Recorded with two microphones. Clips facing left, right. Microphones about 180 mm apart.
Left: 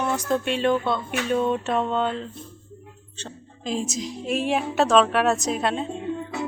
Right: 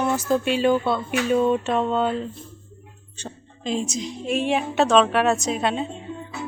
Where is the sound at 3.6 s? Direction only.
Centre (ahead or behind).